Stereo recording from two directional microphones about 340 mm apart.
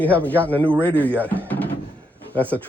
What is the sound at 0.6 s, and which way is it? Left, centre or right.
Speech, centre.